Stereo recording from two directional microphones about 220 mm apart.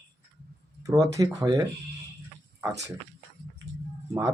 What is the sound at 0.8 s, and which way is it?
Speech, 15° right (ahead or behind).